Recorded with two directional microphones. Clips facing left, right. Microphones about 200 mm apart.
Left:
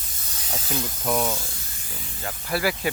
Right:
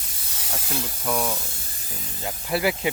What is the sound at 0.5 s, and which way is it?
Speech, 10° right (ahead or behind).